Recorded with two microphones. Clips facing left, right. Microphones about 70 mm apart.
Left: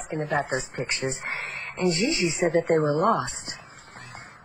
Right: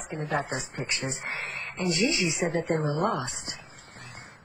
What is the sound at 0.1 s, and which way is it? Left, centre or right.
Speech, left.